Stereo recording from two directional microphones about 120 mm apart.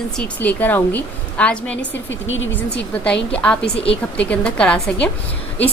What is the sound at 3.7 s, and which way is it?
Speech, 55° left (ahead or behind).